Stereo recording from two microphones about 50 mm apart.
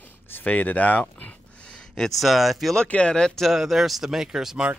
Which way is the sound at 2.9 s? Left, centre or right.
Centre.